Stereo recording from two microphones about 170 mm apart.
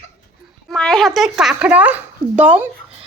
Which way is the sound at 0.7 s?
5° left (ahead or behind).